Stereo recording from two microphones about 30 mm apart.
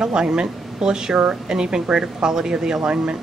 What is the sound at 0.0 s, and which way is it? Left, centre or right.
Speech, right.